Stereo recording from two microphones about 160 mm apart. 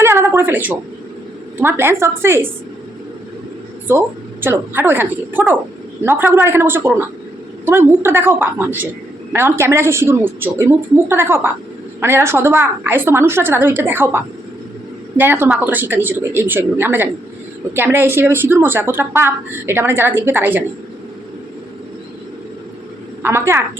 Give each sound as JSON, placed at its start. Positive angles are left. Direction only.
{"t": 0.0, "sound": "a sound", "side_deg": -15}
{"t": 1.5, "sound": "a woman's voice", "side_deg": -15}
{"t": 3.8, "sound": "a woman's voice", "side_deg": -15}
{"t": 15.2, "sound": "a woman's voice", "side_deg": -10}
{"t": 23.2, "sound": "a woman's voice", "side_deg": -15}